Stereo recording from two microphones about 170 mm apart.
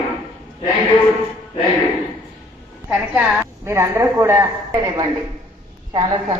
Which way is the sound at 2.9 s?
5° right (ahead or behind).